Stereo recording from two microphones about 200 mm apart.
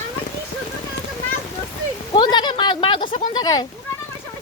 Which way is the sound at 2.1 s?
20° left (ahead or behind).